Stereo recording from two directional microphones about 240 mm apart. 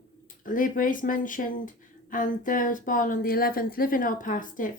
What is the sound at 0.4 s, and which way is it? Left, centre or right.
Speech, left.